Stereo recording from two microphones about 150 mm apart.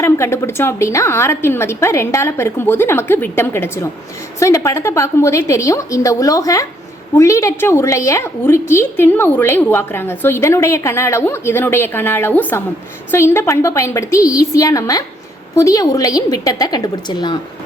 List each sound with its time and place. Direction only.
0.0 s a woman's voice: 20° left (ahead or behind)